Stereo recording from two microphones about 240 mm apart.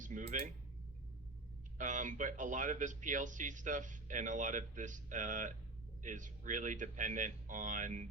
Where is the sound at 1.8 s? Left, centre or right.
Right.